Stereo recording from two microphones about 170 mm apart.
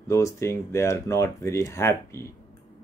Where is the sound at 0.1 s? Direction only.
15° left (ahead or behind).